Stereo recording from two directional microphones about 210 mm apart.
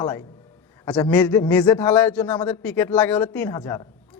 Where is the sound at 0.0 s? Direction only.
20° left (ahead or behind).